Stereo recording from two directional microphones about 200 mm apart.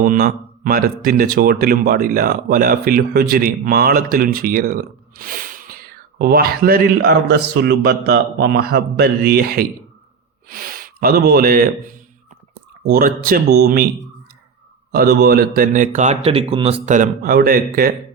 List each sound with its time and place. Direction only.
0.0 s speech: 45° right (ahead or behind)
14.9 s speech: 50° right (ahead or behind)